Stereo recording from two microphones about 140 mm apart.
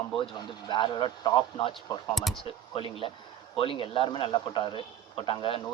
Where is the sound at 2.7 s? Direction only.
40° left (ahead or behind).